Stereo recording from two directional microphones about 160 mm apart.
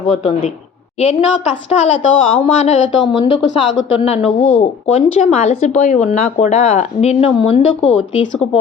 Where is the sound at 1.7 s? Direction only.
40° left (ahead or behind).